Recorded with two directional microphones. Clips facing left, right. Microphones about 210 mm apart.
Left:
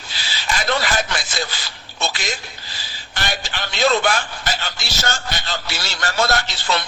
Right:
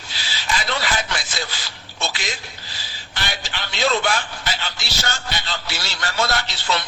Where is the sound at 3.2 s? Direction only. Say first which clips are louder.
Left 3 dB; 45° left (ahead or behind).